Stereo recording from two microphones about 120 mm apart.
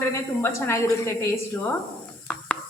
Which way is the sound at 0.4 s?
25° left (ahead or behind).